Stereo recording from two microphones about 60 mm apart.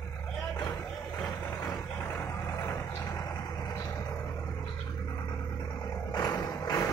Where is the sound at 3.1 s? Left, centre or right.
Left.